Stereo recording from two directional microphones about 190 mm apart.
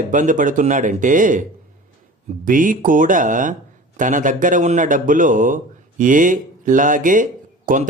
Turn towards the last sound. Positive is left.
turn(degrees=-45)  # may be behind; listen again after turning